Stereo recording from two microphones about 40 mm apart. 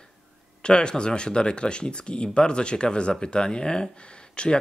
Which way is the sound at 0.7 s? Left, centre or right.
Left.